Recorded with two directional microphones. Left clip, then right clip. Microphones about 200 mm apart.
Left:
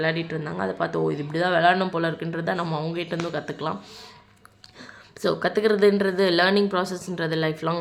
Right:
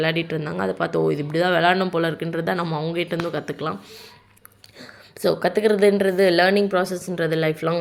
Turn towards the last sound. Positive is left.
turn(degrees=-5)  # may be behind; listen again after turning